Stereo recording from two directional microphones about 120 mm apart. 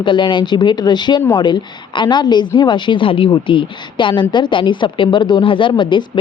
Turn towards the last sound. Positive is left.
turn(degrees=40)  # may be behind; listen again after turning